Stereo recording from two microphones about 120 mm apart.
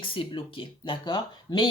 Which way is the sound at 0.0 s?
45° left (ahead or behind).